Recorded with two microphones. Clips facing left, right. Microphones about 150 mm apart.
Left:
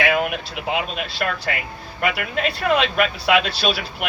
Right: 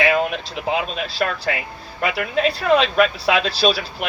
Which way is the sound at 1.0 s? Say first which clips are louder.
Right 2 dB; 35° right (ahead or behind).